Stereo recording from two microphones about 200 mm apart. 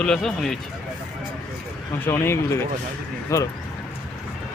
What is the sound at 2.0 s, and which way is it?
Speech, 15° left (ahead or behind).